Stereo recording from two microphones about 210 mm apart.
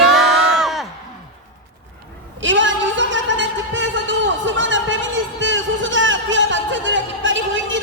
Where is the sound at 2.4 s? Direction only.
60° right (ahead or behind).